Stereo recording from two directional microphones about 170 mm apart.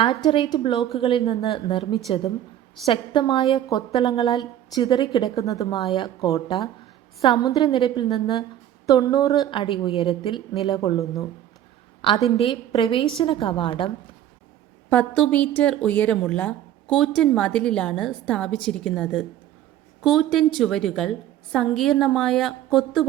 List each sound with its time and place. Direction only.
0.0 s a woman's voice: 35° left (ahead or behind)
10.8 s a woman's voice: 20° left (ahead or behind)
12.4 s a woman's voice: 35° left (ahead or behind)
14.8 s a woman's voice: 10° left (ahead or behind)